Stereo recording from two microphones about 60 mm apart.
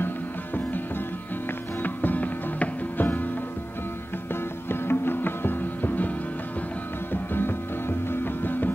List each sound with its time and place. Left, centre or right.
1.8 s music: left
4.6 s music: left